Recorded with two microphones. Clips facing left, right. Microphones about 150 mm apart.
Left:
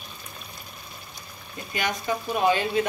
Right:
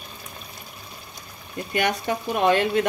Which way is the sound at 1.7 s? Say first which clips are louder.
Right 4 dB; 65° right (ahead or behind).